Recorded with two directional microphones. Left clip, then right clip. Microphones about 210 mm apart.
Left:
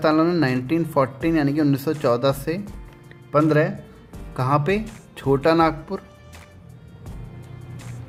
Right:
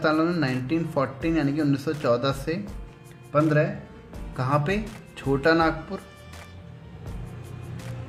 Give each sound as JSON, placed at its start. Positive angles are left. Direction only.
{"t": 0.0, "sound": "speech", "side_deg": 40}